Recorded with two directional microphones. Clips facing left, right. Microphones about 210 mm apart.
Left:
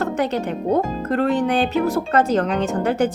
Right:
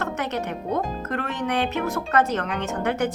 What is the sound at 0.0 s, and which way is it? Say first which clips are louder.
Speech: left 6 dB; 30° left (ahead or behind).